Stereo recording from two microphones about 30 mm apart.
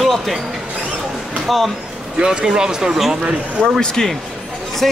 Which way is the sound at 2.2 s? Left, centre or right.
Right.